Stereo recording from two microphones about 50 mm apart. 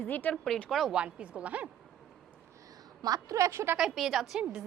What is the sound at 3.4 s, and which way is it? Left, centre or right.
Speech, right.